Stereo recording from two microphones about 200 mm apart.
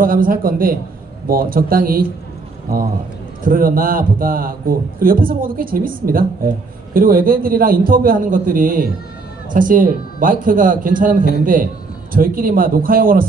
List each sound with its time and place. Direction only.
0.0 s a man's voice: 45° right (ahead or behind)